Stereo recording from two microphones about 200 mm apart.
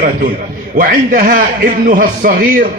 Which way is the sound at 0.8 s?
45° right (ahead or behind).